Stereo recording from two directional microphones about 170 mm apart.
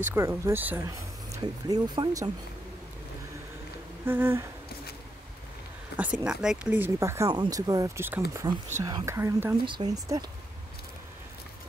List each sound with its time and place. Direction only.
0.0 s speech: 10° right (ahead or behind)
0.8 s speech: 20° right (ahead or behind)
4.0 s speech: 10° right (ahead or behind)
5.9 s speech: 5° right (ahead or behind); by 10.2 s 25° right (ahead or behind)